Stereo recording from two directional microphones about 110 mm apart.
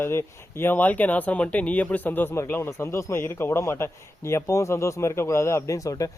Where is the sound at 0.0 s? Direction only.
20° left (ahead or behind).